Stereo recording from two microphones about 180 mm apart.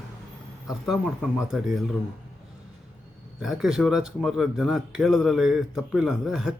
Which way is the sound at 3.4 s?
Centre (ahead or behind).